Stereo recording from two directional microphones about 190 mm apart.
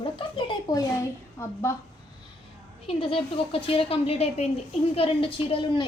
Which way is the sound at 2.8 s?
30° left (ahead or behind).